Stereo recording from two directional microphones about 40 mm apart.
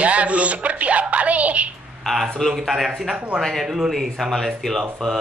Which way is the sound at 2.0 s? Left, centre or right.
Centre.